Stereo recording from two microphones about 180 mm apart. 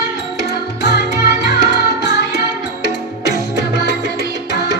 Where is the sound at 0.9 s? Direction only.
65° left (ahead or behind).